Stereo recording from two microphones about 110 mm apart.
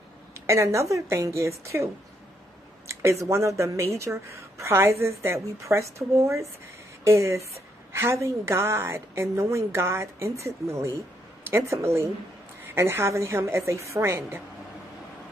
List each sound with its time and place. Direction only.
0.5 s a woman's voice: 25° right (ahead or behind)
2.9 s a woman's voice: 25° right (ahead or behind)